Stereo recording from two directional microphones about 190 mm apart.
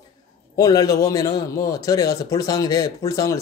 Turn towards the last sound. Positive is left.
turn(degrees=15)  # may be behind; listen again after turning